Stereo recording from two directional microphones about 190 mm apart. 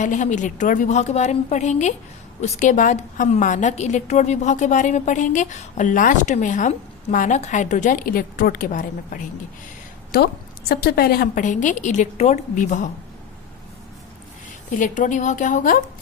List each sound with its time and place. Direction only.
0.0 s a woman's voice: 40° left (ahead or behind)
10.7 s a woman's voice: 55° left (ahead or behind)
14.8 s a woman's voice: 40° left (ahead or behind)